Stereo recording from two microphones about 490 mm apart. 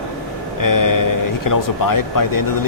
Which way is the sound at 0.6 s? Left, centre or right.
Left.